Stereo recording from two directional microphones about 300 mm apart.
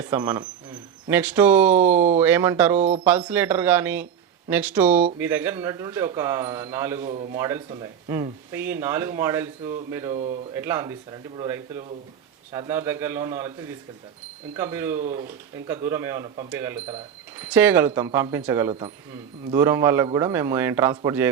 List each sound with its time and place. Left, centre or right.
0.0 s speech: centre
7.0 s a man's voice: right
7.3 s speech: centre